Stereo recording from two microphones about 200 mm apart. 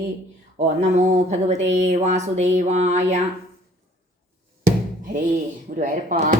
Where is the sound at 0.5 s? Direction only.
35° right (ahead or behind).